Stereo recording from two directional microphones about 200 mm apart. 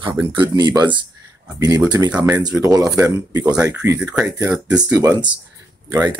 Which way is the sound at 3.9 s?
5° right (ahead or behind).